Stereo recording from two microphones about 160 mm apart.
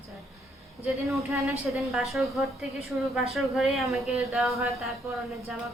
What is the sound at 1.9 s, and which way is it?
Speech, centre (ahead or behind).